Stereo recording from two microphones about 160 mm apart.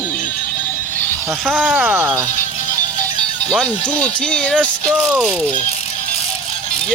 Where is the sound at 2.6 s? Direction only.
10° left (ahead or behind).